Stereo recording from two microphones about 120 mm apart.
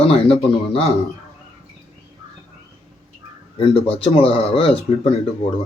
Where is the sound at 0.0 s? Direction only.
60° left (ahead or behind).